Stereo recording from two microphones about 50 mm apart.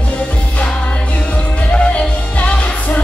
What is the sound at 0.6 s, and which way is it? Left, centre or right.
Music, left.